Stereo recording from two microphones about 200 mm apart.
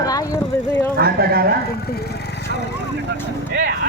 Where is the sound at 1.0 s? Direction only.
50° right (ahead or behind).